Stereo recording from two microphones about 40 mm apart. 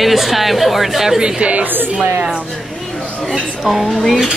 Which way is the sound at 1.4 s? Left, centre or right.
Right.